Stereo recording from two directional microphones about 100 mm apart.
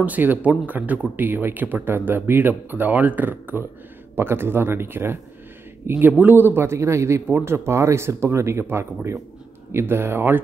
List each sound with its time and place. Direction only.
0.0 s speech: 15° right (ahead or behind)